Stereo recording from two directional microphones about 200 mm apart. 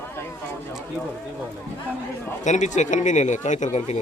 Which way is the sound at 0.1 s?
10° left (ahead or behind).